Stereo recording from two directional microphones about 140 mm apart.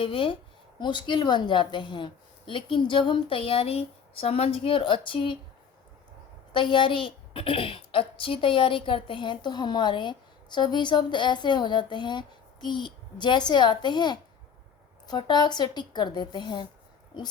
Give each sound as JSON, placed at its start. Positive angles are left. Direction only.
{"t": 0.0, "sound": "a woman's voice", "side_deg": 40}
{"t": 6.5, "sound": "a woman's voice", "side_deg": 35}